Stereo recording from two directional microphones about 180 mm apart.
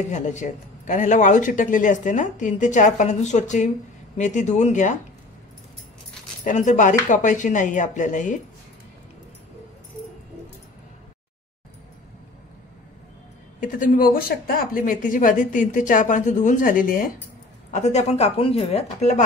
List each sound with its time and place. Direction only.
0.1 s a woman's voice: 40° left (ahead or behind)
6.4 s speech: 45° left (ahead or behind)
13.6 s a woman's voice: 50° left (ahead or behind)